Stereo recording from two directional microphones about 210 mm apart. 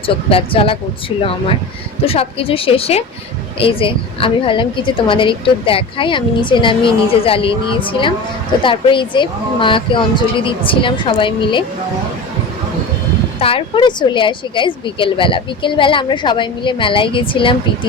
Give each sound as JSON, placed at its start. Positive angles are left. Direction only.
{"t": 0.0, "sound": "a woman's voice", "side_deg": 25}
{"t": 2.0, "sound": "a woman's voice", "side_deg": 25}
{"t": 13.4, "sound": "a woman's voice", "side_deg": 25}